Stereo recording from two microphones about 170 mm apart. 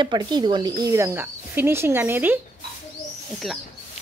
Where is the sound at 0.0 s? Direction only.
25° right (ahead or behind).